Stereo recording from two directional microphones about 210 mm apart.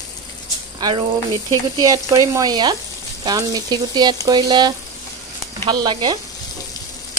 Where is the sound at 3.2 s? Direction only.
20° right (ahead or behind).